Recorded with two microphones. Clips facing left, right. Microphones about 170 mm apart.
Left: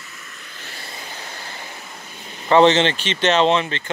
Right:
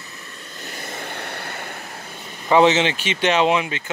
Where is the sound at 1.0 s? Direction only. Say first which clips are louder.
Right 4 dB; 60° right (ahead or behind).